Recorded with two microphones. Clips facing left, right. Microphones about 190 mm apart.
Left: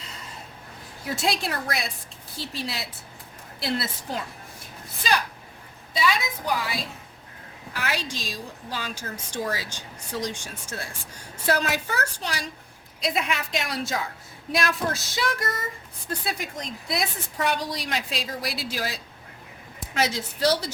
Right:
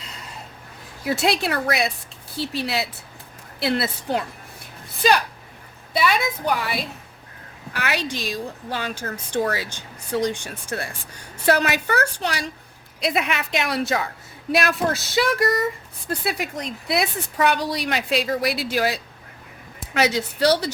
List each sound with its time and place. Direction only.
1.0 s a woman's voice: 70° right (ahead or behind)
5.9 s a woman's voice: 65° right (ahead or behind)